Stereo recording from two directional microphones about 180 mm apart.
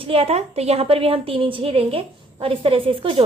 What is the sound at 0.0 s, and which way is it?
A woman's voice, 30° right (ahead or behind).